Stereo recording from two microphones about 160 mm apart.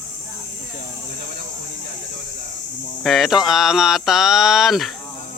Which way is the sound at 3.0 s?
Centre (ahead or behind).